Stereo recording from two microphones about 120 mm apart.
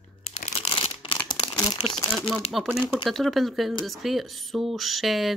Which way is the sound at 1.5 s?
35° left (ahead or behind).